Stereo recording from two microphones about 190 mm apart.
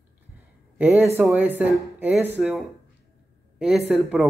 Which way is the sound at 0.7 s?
10° right (ahead or behind).